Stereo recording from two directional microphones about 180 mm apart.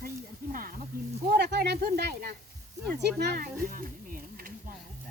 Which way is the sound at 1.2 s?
65° right (ahead or behind).